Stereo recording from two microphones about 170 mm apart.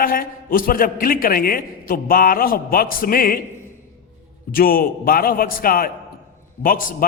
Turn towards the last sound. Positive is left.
turn(degrees=55)  # may be behind; listen again after turning